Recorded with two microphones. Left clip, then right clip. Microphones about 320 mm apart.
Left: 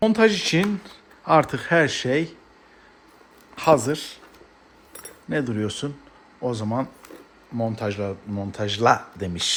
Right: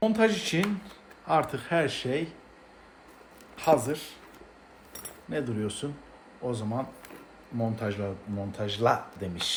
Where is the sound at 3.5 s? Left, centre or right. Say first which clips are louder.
Left 6 dB; left.